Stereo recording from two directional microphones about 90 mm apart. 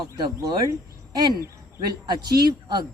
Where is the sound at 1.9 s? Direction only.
50° right (ahead or behind).